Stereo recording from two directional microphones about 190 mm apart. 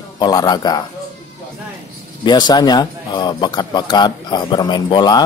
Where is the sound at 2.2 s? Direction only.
20° left (ahead or behind).